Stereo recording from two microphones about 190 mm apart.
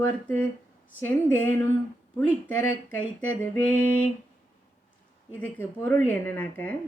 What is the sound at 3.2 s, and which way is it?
Speech, 10° left (ahead or behind).